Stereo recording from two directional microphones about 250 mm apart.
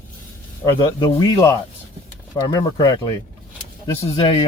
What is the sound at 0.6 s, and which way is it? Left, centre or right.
Speech, centre.